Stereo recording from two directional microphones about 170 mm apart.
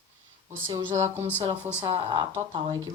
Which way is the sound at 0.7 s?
15° right (ahead or behind).